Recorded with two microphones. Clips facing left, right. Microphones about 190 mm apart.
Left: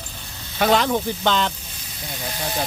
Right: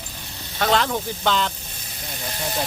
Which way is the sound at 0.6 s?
5° left (ahead or behind).